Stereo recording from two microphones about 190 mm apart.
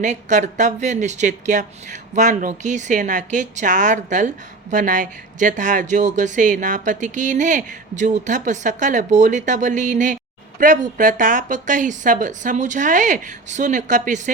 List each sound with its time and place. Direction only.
0.0 s speech: 40° right (ahead or behind)